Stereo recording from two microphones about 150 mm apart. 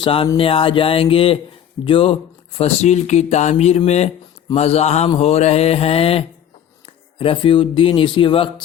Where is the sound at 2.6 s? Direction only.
45° left (ahead or behind).